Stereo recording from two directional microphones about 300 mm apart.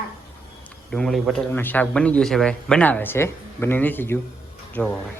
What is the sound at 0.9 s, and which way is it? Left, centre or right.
A man's voice, centre.